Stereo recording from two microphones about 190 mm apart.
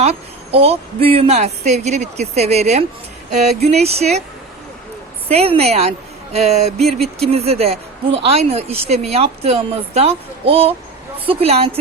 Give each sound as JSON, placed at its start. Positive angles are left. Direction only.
{"t": 0.0, "sound": "a woman's voice", "side_deg": -30}
{"t": 5.3, "sound": "a woman's voice", "side_deg": -30}